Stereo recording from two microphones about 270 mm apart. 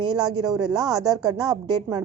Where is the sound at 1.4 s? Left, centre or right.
Centre.